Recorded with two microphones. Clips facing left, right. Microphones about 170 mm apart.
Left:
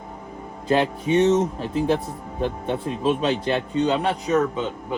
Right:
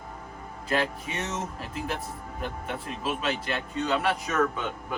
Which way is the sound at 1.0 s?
25° left (ahead or behind).